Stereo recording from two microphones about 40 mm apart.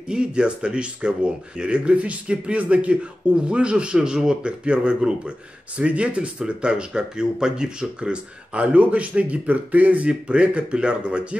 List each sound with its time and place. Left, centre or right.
0.1 s speech: right
10.0 s speech: right